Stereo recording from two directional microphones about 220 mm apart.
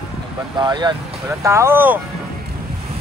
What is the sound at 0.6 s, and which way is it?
Speech, 20° right (ahead or behind).